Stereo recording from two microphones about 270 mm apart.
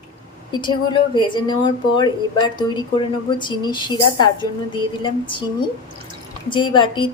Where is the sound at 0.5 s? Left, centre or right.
Centre.